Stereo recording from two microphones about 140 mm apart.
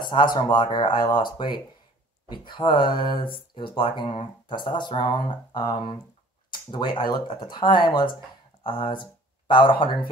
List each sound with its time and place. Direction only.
0.0 s speech: 30° left (ahead or behind)